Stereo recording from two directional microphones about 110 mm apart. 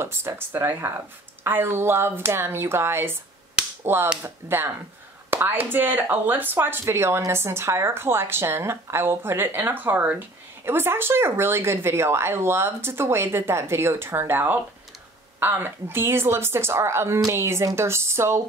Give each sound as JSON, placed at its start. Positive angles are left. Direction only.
{"t": 0.0, "sound": "speech", "side_deg": -25}